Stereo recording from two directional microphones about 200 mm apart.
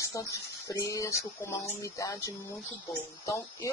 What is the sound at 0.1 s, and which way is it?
Speech, 15° left (ahead or behind).